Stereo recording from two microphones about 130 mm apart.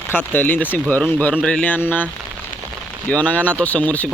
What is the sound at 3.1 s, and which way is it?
Speech, 10° left (ahead or behind).